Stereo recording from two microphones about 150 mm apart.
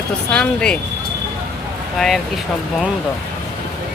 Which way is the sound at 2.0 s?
Centre (ahead or behind).